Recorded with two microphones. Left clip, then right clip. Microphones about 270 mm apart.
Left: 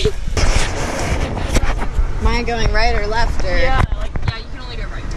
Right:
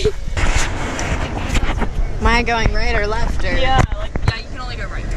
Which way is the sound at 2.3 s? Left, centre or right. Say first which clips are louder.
Right 4 dB; right.